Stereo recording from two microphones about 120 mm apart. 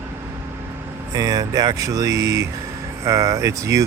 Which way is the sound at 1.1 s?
30° right (ahead or behind).